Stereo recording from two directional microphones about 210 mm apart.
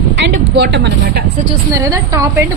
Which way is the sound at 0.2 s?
55° right (ahead or behind).